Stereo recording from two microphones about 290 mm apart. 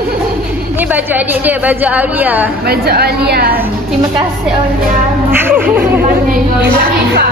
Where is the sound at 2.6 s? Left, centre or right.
Right.